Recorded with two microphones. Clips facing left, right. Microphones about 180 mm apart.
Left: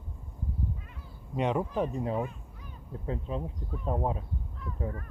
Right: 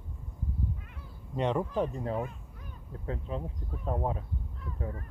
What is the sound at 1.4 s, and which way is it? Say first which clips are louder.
Speech: even; 10° left (ahead or behind).